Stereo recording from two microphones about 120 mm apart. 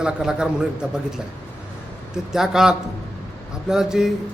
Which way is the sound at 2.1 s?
5° right (ahead or behind).